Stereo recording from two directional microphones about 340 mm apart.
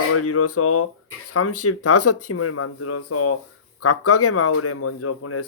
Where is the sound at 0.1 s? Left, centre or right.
Left.